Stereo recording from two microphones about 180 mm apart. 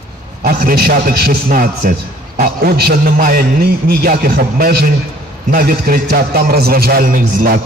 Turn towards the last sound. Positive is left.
turn(degrees=-55)  # may be behind; listen again after turning